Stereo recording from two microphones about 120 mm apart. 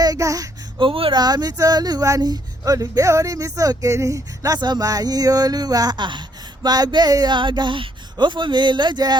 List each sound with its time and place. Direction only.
0.0 s a sound: 30° right (ahead or behind)
0.8 s speech: 50° right (ahead or behind)
1.1 s speech: 35° right (ahead or behind)